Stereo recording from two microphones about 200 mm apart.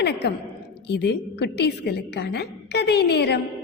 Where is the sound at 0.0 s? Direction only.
55° left (ahead or behind).